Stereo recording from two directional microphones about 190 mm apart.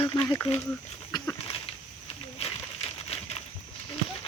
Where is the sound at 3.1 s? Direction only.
30° left (ahead or behind).